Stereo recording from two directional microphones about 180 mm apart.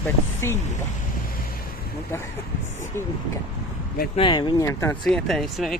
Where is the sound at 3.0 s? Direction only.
15° left (ahead or behind).